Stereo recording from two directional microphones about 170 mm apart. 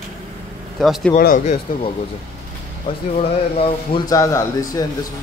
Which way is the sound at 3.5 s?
25° left (ahead or behind).